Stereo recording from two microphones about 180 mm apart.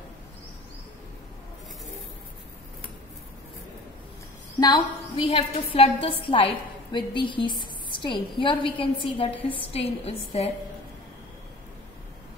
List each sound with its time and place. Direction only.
4.6 s a woman's voice: 25° left (ahead or behind)